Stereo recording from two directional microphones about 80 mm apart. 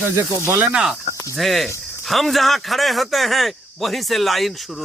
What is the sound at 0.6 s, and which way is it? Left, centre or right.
Cricket, centre.